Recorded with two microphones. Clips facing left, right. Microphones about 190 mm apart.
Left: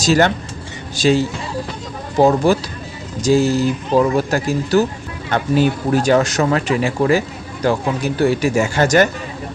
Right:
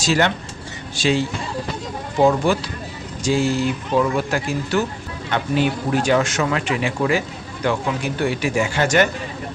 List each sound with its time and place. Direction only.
0.0 s speech: 40° left (ahead or behind)